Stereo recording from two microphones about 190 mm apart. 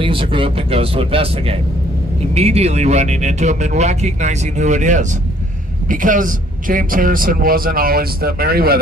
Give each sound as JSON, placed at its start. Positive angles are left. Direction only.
{"t": 0.0, "sound": "a man's voice", "side_deg": -25}